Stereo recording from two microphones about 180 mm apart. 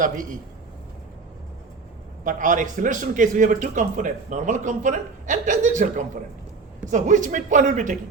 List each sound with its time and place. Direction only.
0.0 s speech: 45° right (ahead or behind)
2.2 s speech: 45° right (ahead or behind)